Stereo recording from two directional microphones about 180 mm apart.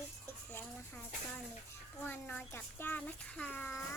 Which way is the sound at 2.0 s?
10° left (ahead or behind).